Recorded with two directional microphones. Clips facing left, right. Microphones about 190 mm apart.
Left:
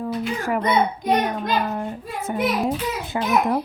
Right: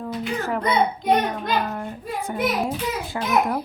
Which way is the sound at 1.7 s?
20° left (ahead or behind).